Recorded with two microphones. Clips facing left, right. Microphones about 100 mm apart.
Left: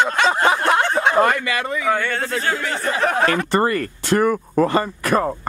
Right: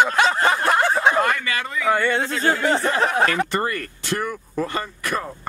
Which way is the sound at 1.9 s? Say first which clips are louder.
Right 2 dB; 15° right (ahead or behind).